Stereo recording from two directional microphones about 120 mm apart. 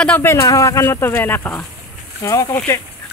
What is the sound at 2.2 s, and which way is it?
Speech, 25° left (ahead or behind).